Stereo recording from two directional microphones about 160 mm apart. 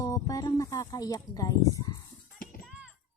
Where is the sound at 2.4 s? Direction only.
60° left (ahead or behind).